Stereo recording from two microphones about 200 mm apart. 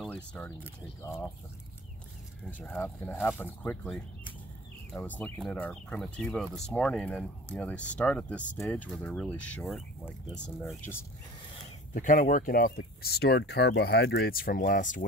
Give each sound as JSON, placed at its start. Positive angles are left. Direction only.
{"t": 0.1, "sound": "speech", "side_deg": 10}
{"t": 2.6, "sound": "speech", "side_deg": 5}
{"t": 11.9, "sound": "speech", "side_deg": 40}